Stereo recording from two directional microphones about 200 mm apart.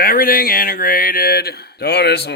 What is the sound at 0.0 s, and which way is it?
Speech, 45° left (ahead or behind).